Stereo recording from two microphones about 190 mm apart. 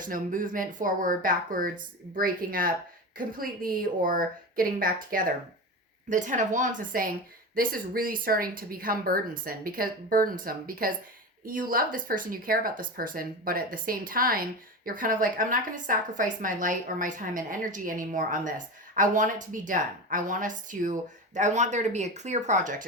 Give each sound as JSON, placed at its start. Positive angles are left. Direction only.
{"t": 0.0, "sound": "a woman's voice", "side_deg": -45}